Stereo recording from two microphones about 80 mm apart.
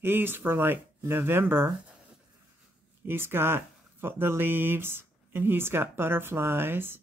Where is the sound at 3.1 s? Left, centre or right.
Right.